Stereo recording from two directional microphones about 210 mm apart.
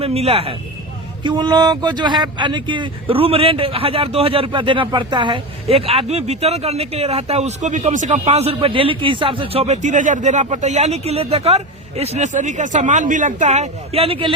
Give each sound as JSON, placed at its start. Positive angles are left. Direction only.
{"t": 0.0, "sound": "speech", "side_deg": -30}